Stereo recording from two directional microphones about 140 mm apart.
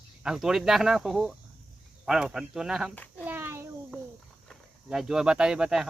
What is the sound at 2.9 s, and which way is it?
Speech, 10° left (ahead or behind).